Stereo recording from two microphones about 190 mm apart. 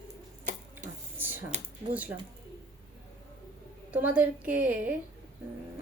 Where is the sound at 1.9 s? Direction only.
10° right (ahead or behind).